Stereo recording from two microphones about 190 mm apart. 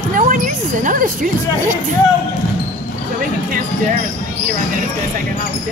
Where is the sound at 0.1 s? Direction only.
45° right (ahead or behind).